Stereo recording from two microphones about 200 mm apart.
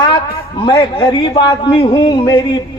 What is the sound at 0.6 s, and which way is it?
A man's voice, 25° left (ahead or behind).